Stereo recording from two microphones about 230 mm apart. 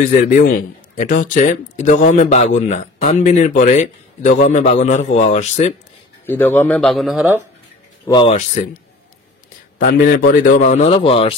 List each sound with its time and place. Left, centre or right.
0.0 s a man's voice: left
6.2 s a man's voice: centre
8.1 s speech: left
9.8 s a man's voice: left